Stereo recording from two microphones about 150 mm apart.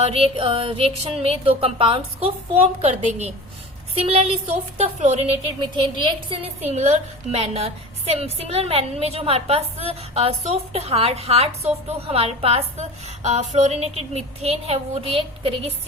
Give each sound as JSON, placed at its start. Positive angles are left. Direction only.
{"t": 0.0, "sound": "a sound", "side_deg": -40}
{"t": 1.2, "sound": "a woman's voice", "side_deg": -40}
{"t": 5.7, "sound": "a woman's voice", "side_deg": -30}